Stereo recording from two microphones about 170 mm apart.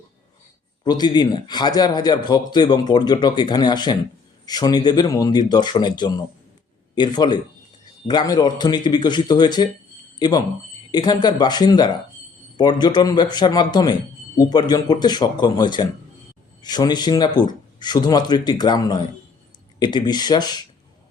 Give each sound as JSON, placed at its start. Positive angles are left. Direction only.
{"t": 0.9, "sound": "speech", "side_deg": 25}